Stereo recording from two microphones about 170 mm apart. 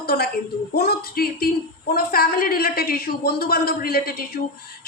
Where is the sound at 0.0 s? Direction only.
65° left (ahead or behind).